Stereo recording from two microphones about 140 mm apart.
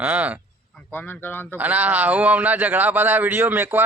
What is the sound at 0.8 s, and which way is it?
Speech, 15° left (ahead or behind).